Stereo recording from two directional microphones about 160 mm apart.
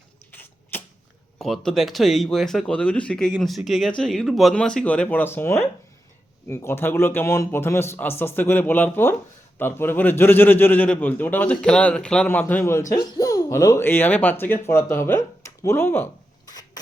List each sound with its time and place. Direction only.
0.3 s typewriter: 10° left (ahead or behind)
1.4 s a man's voice: centre (ahead or behind)
12.9 s a man's voice: 25° left (ahead or behind)
16.5 s mechanisms: 25° left (ahead or behind)